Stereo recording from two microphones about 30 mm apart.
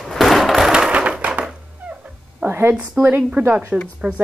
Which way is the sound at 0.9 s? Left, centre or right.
Right.